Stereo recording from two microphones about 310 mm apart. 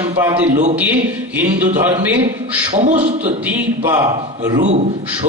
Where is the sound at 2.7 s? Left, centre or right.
Right.